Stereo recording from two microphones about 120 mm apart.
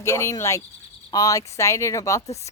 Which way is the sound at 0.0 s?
25° left (ahead or behind).